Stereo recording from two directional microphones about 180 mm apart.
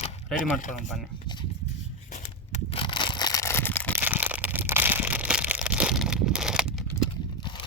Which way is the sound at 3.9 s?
10° right (ahead or behind).